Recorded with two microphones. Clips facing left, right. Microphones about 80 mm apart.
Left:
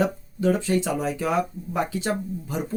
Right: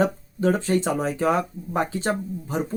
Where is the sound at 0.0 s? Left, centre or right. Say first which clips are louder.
Right 1 dB; right.